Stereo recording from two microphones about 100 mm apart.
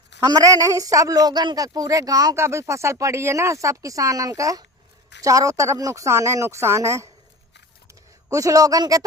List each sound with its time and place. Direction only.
0.3 s a woman's voice: 35° right (ahead or behind)
8.3 s a woman's voice: 35° right (ahead or behind)